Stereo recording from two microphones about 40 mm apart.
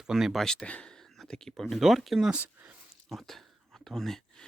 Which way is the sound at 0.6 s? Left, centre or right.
Left.